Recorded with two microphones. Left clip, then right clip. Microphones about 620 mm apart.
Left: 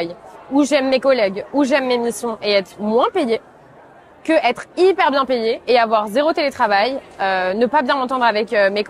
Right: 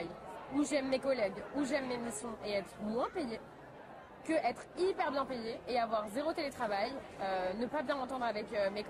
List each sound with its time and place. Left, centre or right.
0.6 s a woman's voice: left